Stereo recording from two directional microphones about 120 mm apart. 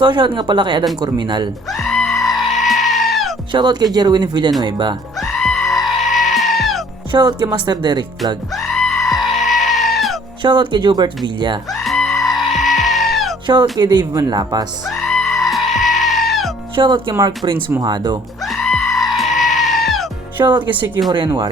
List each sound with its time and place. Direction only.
0.0 s speech: 40° right (ahead or behind)
1.7 s goat: 5° left (ahead or behind)
3.5 s speech: 40° right (ahead or behind)
5.1 s goat: centre (ahead or behind)
7.1 s speech: 40° right (ahead or behind)
8.5 s goat: centre (ahead or behind)
10.4 s speech: 40° right (ahead or behind)
11.7 s goat: centre (ahead or behind)
13.5 s speech: 40° right (ahead or behind)
14.8 s music: 5° left (ahead or behind)
16.7 s speech: 45° right (ahead or behind)
18.4 s goat: 5° left (ahead or behind)
20.4 s speech: 40° right (ahead or behind)